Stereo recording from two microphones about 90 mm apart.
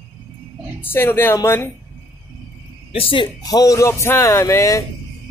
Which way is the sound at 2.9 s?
80° left.